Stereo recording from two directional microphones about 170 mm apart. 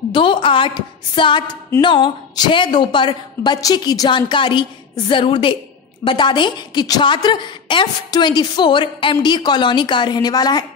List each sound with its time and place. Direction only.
0.1 s a woman's voice: 30° left (ahead or behind)